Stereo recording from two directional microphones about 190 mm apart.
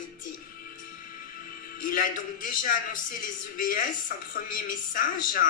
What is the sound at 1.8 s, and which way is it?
A man's voice, 45° left (ahead or behind).